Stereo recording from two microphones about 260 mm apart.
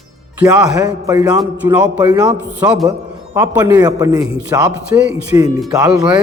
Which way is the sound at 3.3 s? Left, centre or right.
Centre.